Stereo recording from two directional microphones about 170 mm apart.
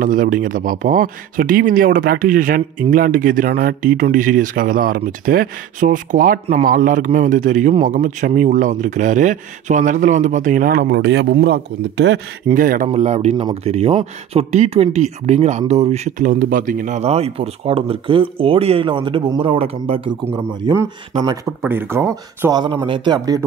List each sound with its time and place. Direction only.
0.0 s speech: 50° right (ahead or behind); by 12.2 s 85° right
12.5 s speech: 55° right (ahead or behind); by 20.2 s 30° right (ahead or behind)
20.6 s speech: 15° right (ahead or behind)